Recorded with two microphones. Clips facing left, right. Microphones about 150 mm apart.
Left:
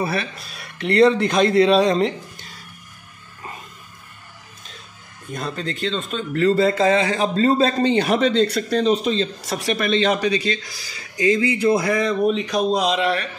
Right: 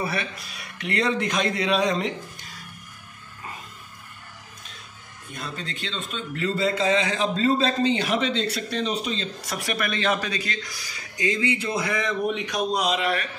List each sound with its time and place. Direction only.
0.0 s a man's voice: 30° left (ahead or behind)
5.3 s a man's voice: 40° left (ahead or behind)